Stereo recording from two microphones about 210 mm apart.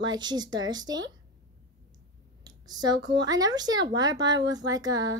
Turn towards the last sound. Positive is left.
turn(degrees=-15)  # may be behind; listen again after turning